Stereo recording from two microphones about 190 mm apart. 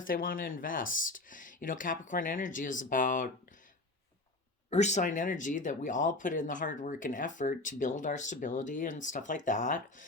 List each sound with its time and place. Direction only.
0.0 s speech: 50° left (ahead or behind)
4.7 s speech: 35° left (ahead or behind)